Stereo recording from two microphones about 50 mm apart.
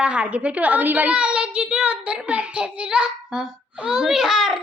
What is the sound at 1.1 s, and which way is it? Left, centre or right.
A child's voice, right.